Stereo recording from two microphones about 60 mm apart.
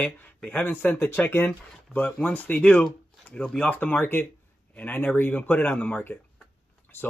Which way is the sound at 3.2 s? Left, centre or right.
Left.